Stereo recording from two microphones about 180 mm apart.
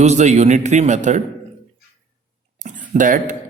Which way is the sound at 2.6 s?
45° right (ahead or behind).